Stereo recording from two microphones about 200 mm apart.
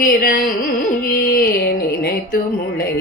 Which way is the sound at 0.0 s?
45° left (ahead or behind).